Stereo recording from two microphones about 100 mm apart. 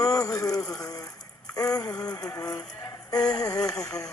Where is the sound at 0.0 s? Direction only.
35° left (ahead or behind).